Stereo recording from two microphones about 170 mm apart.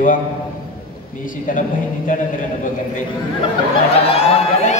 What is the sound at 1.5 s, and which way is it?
Speech, 50° left (ahead or behind).